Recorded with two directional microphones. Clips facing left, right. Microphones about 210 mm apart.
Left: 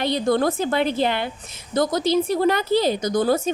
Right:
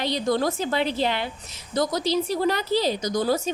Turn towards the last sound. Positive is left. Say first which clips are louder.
# left 4 dB
turn(degrees=55)  # may be behind; listen again after turning